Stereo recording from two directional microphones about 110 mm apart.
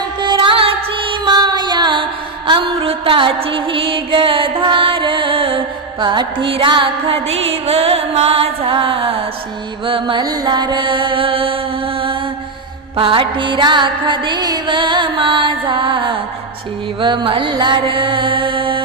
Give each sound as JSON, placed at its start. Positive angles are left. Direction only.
{"t": 0.2, "sound": "music", "side_deg": -45}
{"t": 1.2, "sound": "music", "side_deg": -40}
{"t": 7.3, "sound": "music", "side_deg": -65}
{"t": 10.2, "sound": "music", "side_deg": -40}
{"t": 13.0, "sound": "music", "side_deg": -50}